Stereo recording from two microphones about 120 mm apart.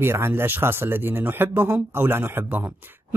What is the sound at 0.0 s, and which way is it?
Speech, 20° right (ahead or behind).